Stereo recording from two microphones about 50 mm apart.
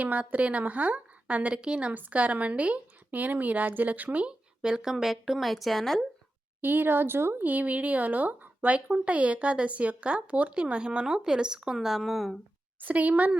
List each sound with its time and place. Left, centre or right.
0.0 s speech: right; by 6.0 s centre
6.6 s speech: right; by 12.4 s centre
12.8 s a woman's voice: right